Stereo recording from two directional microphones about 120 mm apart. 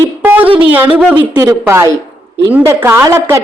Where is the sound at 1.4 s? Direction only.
25° right (ahead or behind).